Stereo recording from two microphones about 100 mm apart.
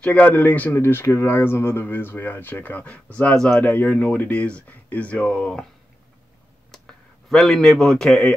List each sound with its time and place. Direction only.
0.0 s speech: 15° left (ahead or behind)
3.5 s speech: 15° left (ahead or behind)
6.7 s a sound: 5° left (ahead or behind)